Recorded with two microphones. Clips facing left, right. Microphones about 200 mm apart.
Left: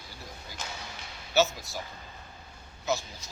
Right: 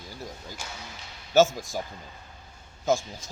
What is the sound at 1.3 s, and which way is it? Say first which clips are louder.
Speech: right 6 dB; 50° right (ahead or behind).